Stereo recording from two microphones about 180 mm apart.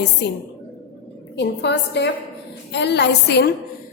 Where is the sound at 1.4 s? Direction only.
70° left (ahead or behind).